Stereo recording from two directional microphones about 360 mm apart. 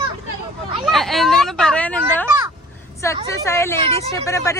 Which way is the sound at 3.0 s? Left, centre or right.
Centre.